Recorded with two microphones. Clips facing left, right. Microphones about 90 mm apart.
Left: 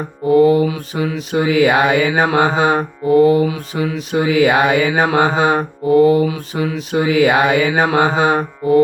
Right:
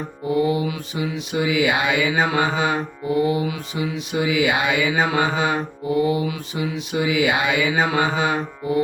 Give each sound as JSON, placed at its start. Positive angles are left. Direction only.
{"t": 0.3, "sound": "mantra", "side_deg": 55}